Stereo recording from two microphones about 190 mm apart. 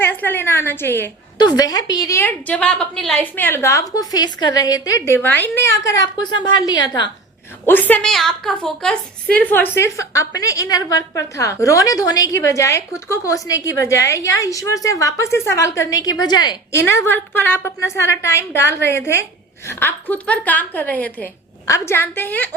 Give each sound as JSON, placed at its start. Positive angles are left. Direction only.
{"t": 0.0, "sound": "a woman's voice", "side_deg": 10}
{"t": 7.6, "sound": "a woman's voice", "side_deg": 10}
{"t": 16.8, "sound": "a woman's voice", "side_deg": 10}